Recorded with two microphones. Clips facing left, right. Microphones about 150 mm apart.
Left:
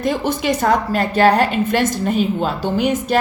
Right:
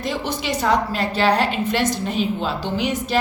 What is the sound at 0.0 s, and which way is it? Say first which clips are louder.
A woman's voice: left 6 dB; 50° left (ahead or behind).